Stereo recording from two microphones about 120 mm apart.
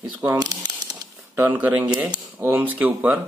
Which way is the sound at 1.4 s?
15° right (ahead or behind).